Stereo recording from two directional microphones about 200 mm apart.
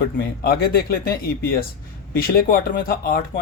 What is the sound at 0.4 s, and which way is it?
A man's voice, 50° left (ahead or behind).